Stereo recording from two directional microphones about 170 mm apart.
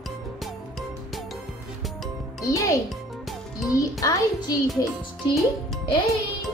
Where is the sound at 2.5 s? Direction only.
20° left (ahead or behind).